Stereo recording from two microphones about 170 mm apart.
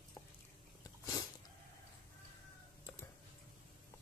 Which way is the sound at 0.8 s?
20° left (ahead or behind).